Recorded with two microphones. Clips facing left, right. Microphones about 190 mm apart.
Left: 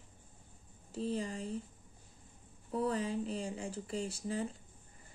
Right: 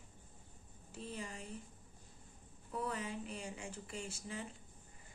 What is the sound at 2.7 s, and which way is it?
Speech, 30° left (ahead or behind).